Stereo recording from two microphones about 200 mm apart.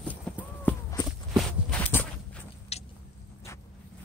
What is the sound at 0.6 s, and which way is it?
Walk, 15° left (ahead or behind).